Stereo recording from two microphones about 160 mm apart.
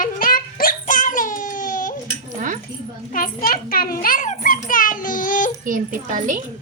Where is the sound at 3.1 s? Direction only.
65° left (ahead or behind).